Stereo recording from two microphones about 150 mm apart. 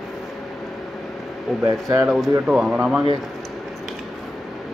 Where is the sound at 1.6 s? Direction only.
20° right (ahead or behind).